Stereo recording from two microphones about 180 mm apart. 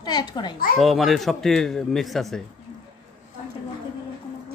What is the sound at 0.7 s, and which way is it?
Speech, centre (ahead or behind).